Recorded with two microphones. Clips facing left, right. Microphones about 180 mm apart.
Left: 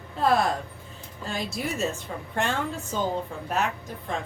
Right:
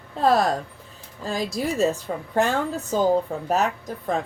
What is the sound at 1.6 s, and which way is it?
A woman's voice, 35° right (ahead or behind).